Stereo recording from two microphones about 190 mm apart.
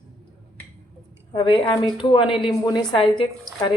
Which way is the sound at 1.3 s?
25° left (ahead or behind).